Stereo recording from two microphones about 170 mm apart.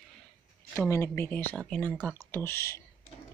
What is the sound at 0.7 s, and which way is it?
Speech, 15° left (ahead or behind).